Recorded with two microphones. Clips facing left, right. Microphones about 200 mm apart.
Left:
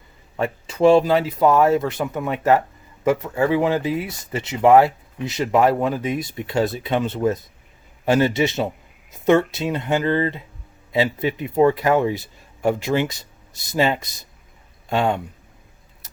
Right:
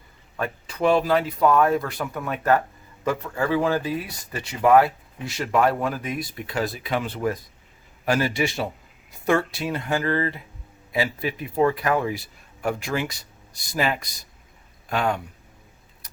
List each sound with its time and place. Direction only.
0.3 s speech: 25° left (ahead or behind)